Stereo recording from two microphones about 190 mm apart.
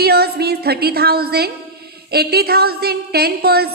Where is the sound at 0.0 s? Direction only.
55° right (ahead or behind).